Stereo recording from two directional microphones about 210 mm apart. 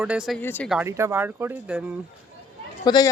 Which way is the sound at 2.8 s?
20° left (ahead or behind).